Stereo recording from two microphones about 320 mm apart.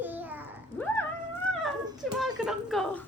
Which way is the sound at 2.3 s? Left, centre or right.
Centre.